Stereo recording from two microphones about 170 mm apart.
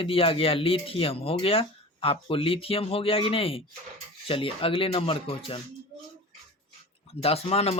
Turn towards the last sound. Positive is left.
turn(degrees=35)  # may be behind; listen again after turning